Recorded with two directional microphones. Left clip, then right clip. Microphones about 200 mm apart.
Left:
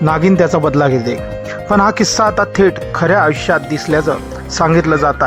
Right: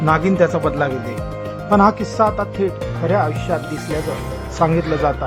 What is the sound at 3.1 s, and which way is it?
Speech, 20° left (ahead or behind).